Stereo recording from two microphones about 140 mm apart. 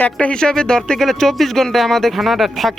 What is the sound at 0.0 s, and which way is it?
Speech, 10° left (ahead or behind).